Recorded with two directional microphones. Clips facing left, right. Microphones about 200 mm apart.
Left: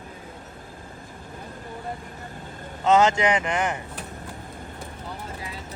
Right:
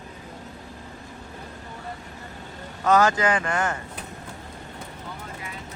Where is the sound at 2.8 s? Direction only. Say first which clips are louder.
Left 1 dB; 20° left (ahead or behind).